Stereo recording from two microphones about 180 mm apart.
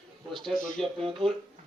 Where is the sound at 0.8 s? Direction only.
Centre (ahead or behind).